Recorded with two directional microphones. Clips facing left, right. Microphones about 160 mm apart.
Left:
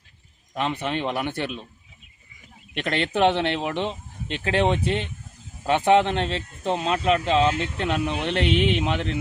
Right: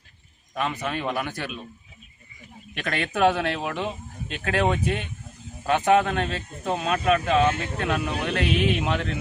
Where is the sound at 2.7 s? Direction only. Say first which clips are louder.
Left 3 dB; 25° left (ahead or behind).